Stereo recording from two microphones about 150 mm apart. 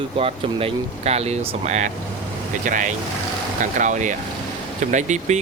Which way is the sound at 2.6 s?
60° right (ahead or behind).